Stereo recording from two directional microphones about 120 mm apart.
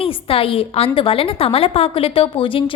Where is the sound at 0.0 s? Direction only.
50° left (ahead or behind).